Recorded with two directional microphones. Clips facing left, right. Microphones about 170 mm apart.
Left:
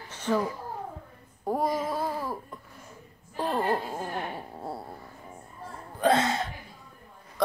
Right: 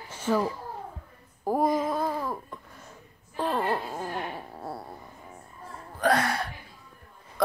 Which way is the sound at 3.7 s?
20° left (ahead or behind).